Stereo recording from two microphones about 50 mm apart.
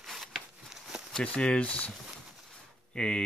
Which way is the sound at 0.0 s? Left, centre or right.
Centre.